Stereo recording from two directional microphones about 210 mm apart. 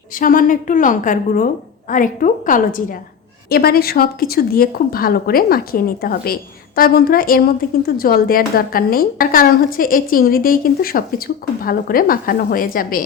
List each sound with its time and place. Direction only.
0.1 s a woman's voice: 40° left (ahead or behind)